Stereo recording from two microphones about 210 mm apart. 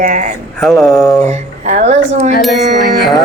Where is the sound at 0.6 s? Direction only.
Centre (ahead or behind).